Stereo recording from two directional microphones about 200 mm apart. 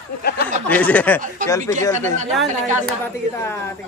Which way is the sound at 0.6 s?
10° left (ahead or behind).